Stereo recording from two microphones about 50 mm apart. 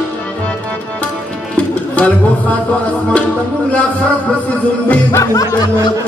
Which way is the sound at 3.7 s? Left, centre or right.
Left.